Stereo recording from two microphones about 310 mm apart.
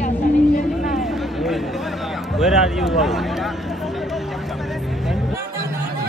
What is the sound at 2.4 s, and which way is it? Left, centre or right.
Speech, centre.